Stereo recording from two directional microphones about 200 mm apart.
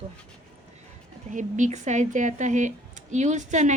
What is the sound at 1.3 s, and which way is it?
Speech, 40° right (ahead or behind).